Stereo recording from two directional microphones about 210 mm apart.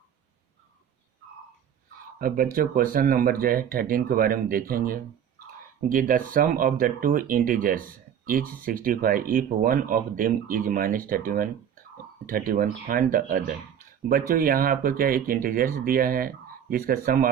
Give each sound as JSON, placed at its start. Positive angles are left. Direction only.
{"t": 2.1, "sound": "speech", "side_deg": -45}